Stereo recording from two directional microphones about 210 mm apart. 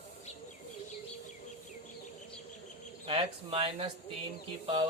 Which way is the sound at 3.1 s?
25° right (ahead or behind).